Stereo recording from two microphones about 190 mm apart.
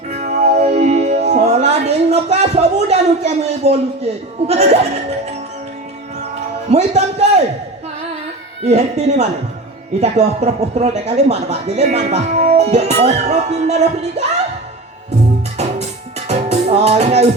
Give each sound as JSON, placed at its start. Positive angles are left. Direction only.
{"t": 0.1, "sound": "music", "side_deg": -35}
{"t": 6.7, "sound": "speech", "side_deg": -35}
{"t": 8.6, "sound": "speech", "side_deg": -35}
{"t": 15.5, "sound": "music", "side_deg": -35}